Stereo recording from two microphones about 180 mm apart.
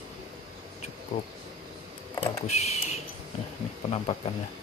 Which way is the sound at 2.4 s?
35° left (ahead or behind).